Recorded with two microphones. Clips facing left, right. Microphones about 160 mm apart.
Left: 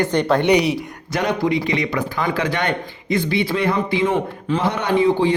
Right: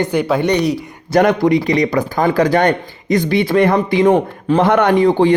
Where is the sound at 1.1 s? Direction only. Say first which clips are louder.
Right 7 dB; 50° right (ahead or behind).